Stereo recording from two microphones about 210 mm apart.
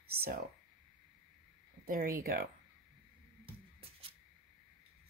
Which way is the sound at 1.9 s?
45° right (ahead or behind).